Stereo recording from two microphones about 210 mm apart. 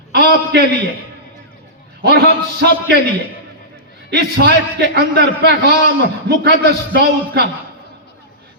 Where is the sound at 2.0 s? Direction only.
50° right (ahead or behind).